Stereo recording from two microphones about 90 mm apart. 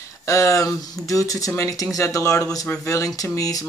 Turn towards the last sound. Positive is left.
turn(degrees=40)  # may be behind; listen again after turning